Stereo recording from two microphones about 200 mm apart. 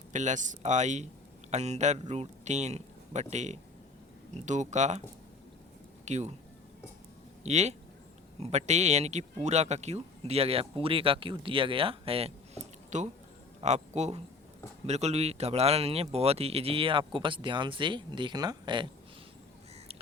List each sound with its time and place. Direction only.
0.1 s speech: 35° right (ahead or behind)
6.1 s speech: 35° right (ahead or behind)
7.4 s speech: 35° right (ahead or behind)